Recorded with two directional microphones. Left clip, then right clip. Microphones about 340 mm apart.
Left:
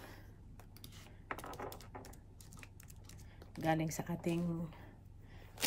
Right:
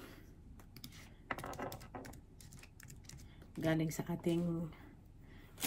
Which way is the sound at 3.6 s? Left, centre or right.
Centre.